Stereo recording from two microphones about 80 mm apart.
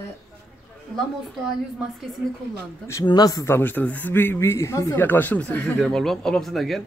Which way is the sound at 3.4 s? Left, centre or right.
Left.